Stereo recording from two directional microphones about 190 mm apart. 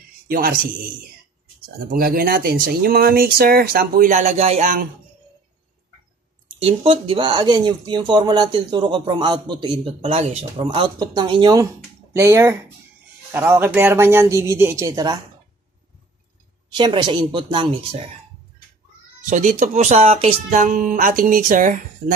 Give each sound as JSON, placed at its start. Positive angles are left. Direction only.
{"t": 0.3, "sound": "speech", "side_deg": -50}
{"t": 6.6, "sound": "speech", "side_deg": -30}
{"t": 16.7, "sound": "speech", "side_deg": -25}
{"t": 19.2, "sound": "speech", "side_deg": -40}